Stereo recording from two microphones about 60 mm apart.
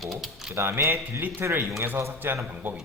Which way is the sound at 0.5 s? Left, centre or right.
Right.